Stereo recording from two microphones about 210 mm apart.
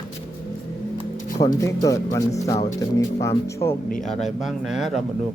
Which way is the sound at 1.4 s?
15° left (ahead or behind).